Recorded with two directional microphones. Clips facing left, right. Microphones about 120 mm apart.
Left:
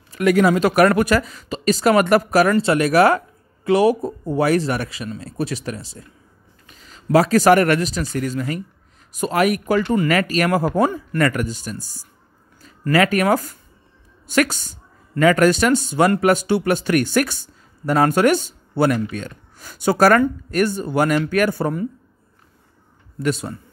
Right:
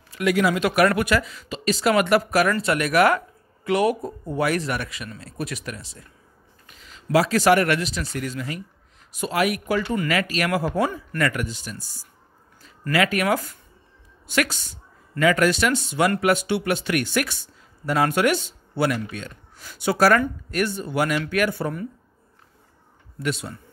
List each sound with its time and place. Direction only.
0.1 s speech: 45° left (ahead or behind)
2.5 s speech: 30° left (ahead or behind)
6.9 s speech: 45° left (ahead or behind)
23.2 s speech: 40° left (ahead or behind)